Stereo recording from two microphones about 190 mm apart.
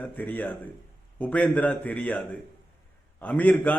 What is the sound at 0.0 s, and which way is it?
A man's voice, 10° left (ahead or behind).